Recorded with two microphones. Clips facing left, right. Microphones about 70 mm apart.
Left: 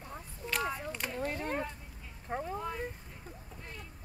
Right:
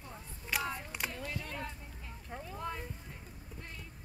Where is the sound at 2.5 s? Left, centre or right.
Centre.